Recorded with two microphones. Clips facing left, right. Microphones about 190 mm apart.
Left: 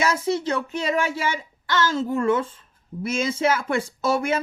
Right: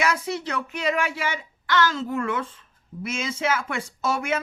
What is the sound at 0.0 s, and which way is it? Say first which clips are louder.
Speech: left 3 dB; 25° left (ahead or behind).